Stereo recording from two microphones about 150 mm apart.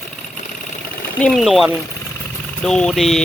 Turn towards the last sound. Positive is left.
turn(degrees=0)  # may be behind; listen again after turning